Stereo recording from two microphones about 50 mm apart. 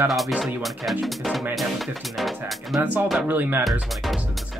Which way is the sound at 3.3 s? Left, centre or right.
Right.